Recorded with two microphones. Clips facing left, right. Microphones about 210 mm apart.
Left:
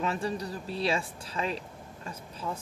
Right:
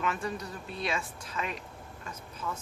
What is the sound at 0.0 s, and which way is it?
Speech, 30° left (ahead or behind).